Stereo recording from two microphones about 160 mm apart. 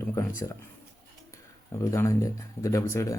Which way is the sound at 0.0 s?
20° left (ahead or behind).